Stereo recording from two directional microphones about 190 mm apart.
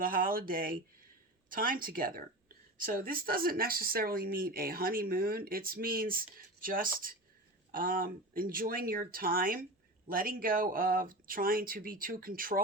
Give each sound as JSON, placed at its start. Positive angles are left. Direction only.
{"t": 0.0, "sound": "speech", "side_deg": -50}